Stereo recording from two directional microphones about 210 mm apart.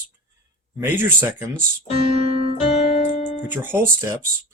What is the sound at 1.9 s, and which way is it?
Keyboard, 30° right (ahead or behind).